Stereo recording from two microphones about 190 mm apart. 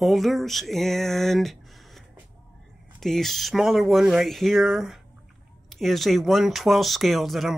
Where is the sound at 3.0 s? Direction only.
Centre (ahead or behind).